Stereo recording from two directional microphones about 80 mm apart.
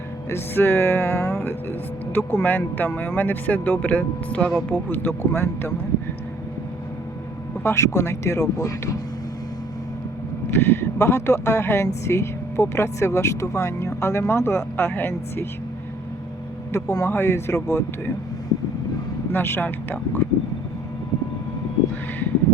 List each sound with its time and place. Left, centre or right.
0.3 s speech: left
7.6 s speech: left
10.5 s speech: left
16.7 s speech: left
17.1 s speech: left
19.3 s speech: left